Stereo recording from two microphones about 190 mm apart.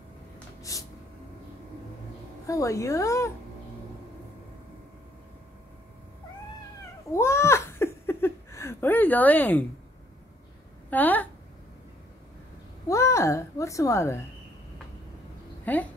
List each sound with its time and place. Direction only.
0.6 s a sound: 15° left (ahead or behind)
2.4 s speech: 15° left (ahead or behind)
7.1 s a sound: 15° left (ahead or behind)
10.9 s speech: 10° left (ahead or behind)
12.8 s a woman's voice: 15° left (ahead or behind)
15.6 s speech: 10° left (ahead or behind)